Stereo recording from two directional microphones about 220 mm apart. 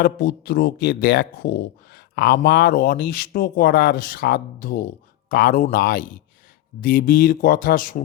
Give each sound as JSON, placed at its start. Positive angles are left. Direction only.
{"t": 0.0, "sound": "speech", "side_deg": 45}